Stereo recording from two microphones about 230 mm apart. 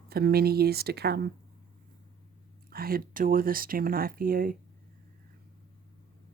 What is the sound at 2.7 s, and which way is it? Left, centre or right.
A woman's voice, right.